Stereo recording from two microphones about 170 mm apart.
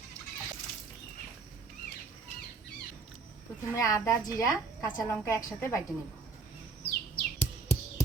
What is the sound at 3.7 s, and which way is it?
A woman's voice, 20° left (ahead or behind).